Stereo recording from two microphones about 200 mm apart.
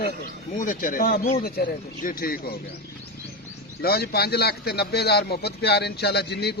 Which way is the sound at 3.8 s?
50° left (ahead or behind).